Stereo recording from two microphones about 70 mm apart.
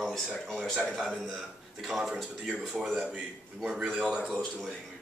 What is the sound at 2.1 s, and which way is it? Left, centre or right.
Speech, centre.